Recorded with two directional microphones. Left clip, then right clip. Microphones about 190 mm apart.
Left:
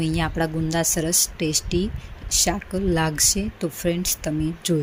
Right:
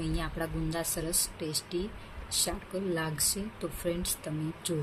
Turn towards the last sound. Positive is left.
turn(degrees=35)  # may be behind; listen again after turning